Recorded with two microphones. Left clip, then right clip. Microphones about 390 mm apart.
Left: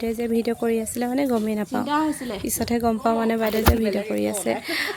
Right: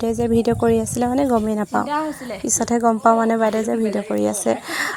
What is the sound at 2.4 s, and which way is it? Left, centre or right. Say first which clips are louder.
Speech: right 6 dB; left.